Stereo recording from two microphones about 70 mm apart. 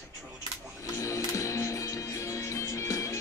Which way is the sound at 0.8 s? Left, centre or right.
Left.